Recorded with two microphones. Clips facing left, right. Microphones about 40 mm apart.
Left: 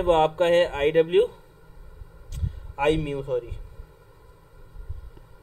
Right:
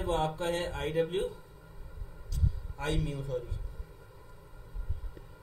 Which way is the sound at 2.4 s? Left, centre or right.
Left.